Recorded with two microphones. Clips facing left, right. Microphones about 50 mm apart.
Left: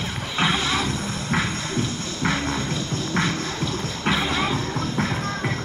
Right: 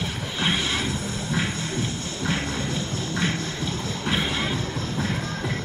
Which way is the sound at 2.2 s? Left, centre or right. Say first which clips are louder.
Left 3 dB; left.